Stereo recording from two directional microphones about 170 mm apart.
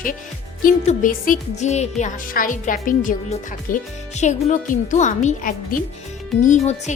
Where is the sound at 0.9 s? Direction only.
55° left (ahead or behind).